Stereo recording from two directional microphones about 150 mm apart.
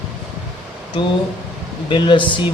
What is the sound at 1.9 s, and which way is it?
Speech, 30° left (ahead or behind).